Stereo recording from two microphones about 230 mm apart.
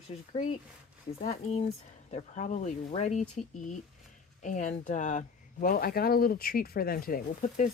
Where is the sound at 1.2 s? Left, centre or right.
Left.